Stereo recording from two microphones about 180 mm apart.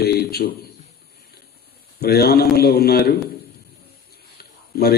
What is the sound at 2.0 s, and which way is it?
Speech, 60° left (ahead or behind).